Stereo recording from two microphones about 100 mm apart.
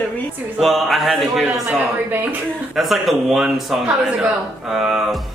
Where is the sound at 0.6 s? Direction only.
Centre (ahead or behind).